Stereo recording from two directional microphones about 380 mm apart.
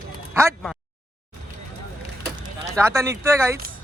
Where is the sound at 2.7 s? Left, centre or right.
Centre.